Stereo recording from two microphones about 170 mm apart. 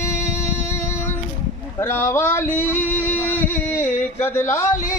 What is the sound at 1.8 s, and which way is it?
Speech, 15° left (ahead or behind).